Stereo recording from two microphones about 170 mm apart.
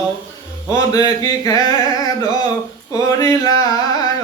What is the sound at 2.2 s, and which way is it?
Speech, 20° left (ahead or behind).